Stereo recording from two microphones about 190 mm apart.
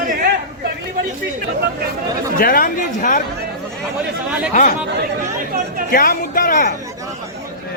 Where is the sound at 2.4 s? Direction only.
50° left (ahead or behind).